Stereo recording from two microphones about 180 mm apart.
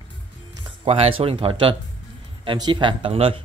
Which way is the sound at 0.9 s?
35° right (ahead or behind).